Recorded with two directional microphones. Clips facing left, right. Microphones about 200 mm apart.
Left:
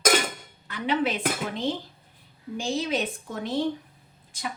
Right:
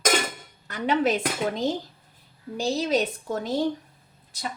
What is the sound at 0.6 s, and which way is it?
A woman's voice, 45° right (ahead or behind).